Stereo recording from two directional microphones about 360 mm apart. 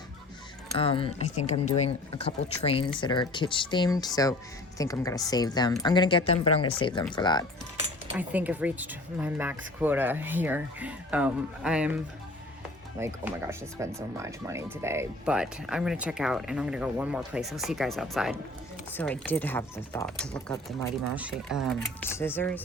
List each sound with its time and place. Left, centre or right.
0.8 s speech: centre
8.1 s speech: centre
13.0 s speech: centre